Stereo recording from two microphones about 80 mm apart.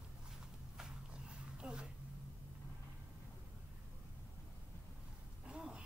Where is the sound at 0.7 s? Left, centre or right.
Centre.